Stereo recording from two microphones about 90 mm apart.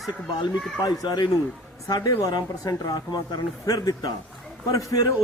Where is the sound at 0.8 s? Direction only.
50° left (ahead or behind).